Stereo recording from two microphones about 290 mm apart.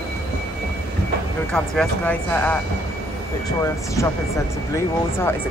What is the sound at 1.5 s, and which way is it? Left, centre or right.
Speech, centre.